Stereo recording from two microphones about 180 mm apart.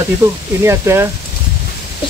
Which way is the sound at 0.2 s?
15° right (ahead or behind).